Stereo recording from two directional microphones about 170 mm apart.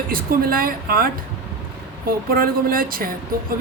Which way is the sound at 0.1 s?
60° right (ahead or behind).